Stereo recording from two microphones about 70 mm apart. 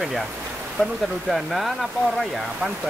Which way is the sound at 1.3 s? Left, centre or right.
Centre.